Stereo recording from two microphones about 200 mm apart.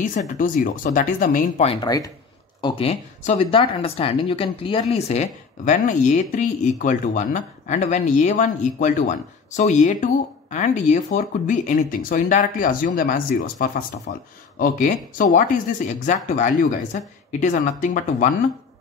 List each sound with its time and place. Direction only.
0.4 s speech: 40° left (ahead or behind)
1.9 s speech: 15° left (ahead or behind)
2.6 s speech: 30° left (ahead or behind)